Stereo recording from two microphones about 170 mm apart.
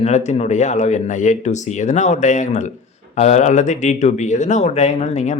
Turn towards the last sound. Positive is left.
turn(degrees=45)  # may be behind; listen again after turning